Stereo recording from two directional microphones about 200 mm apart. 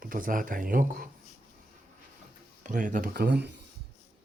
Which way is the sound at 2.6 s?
40° right (ahead or behind).